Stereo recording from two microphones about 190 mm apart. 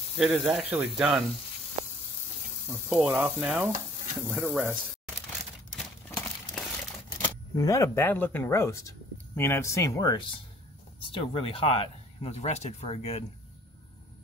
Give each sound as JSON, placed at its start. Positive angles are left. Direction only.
{"t": 0.2, "sound": "speech", "side_deg": -10}
{"t": 0.9, "sound": "sizzle", "side_deg": -5}
{"t": 1.8, "sound": "sizzle", "side_deg": -15}
{"t": 4.4, "sound": "speech", "side_deg": -5}
{"t": 5.8, "sound": "a sound", "side_deg": 0}
{"t": 7.2, "sound": "speech", "side_deg": 20}
{"t": 11.1, "sound": "speech", "side_deg": 30}